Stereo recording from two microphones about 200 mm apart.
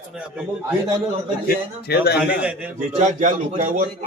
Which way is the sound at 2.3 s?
5° right (ahead or behind).